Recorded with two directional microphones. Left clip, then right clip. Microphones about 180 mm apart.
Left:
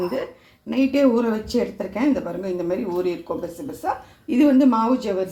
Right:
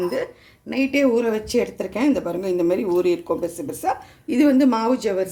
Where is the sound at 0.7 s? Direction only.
10° right (ahead or behind); by 5.3 s 30° right (ahead or behind).